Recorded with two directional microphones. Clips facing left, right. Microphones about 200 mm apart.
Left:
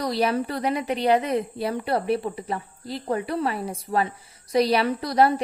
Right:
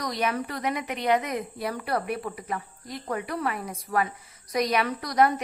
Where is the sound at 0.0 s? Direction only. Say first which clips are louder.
Left 5 dB; 30° left (ahead or behind).